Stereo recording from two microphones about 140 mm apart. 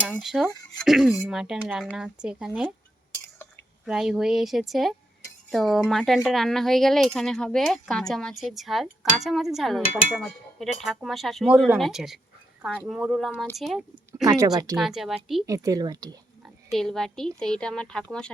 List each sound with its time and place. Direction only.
0.2 s speech: centre (ahead or behind)
3.8 s speech: 5° right (ahead or behind)
14.3 s speech: 25° right (ahead or behind)
14.8 s speech: centre (ahead or behind)
15.4 s speech: 25° right (ahead or behind)
16.7 s speech: 5° left (ahead or behind)